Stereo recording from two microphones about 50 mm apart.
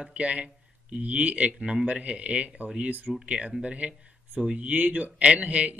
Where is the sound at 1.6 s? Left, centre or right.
Centre.